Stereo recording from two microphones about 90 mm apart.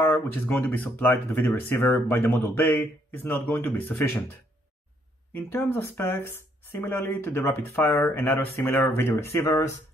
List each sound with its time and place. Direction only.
0.0 s speech: 20° left (ahead or behind)
5.3 s speech: 25° left (ahead or behind)